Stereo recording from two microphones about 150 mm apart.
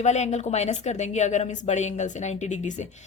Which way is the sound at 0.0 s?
50° left (ahead or behind).